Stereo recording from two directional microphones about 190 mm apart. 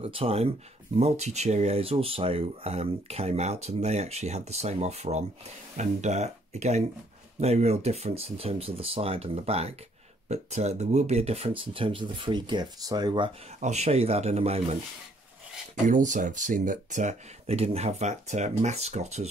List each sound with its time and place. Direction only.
0.0 s speech: 30° right (ahead or behind)
13.6 s speech: 35° right (ahead or behind)
15.9 s speech: 40° right (ahead or behind)